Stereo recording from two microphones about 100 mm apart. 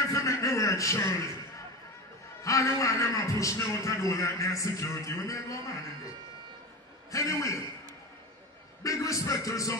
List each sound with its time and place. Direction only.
0.1 s a sound: 30° left (ahead or behind)
2.4 s a man's voice: 35° left (ahead or behind)
7.1 s a man's voice: 30° left (ahead or behind)
8.8 s a man's voice: 35° left (ahead or behind)